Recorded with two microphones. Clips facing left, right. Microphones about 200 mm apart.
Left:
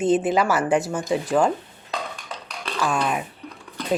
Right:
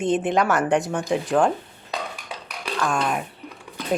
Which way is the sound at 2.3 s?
10° right (ahead or behind).